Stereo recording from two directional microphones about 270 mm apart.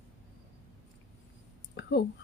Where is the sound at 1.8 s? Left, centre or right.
Left.